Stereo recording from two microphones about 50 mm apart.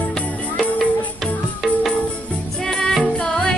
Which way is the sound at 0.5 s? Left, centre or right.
Centre.